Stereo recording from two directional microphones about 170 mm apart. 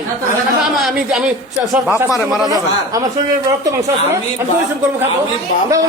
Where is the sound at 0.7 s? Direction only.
Centre (ahead or behind).